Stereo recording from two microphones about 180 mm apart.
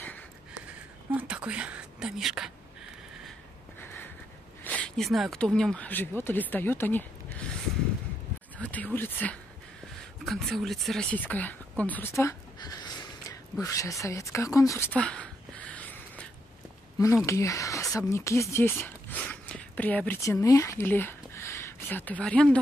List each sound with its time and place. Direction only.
1.1 s speech: 10° right (ahead or behind)
3.8 s a sound: 10° left (ahead or behind)
4.6 s speech: 5° left (ahead or behind)
8.5 s a woman's voice: 10° left (ahead or behind)
13.6 s a sound: 20° left (ahead or behind)
17.3 s speech: 15° left (ahead or behind)